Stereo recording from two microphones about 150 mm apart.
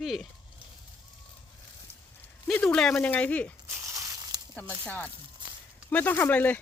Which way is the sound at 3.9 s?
20° right (ahead or behind).